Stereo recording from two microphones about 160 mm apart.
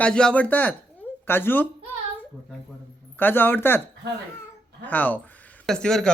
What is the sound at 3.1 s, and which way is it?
Speech, 10° left (ahead or behind).